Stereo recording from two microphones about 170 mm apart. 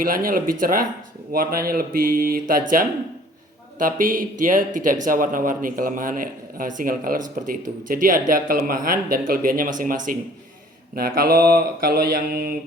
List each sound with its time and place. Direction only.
0.0 s speech: 55° right (ahead or behind)